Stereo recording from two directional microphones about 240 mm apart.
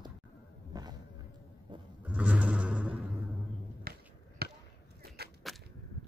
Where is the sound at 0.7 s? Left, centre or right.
Centre.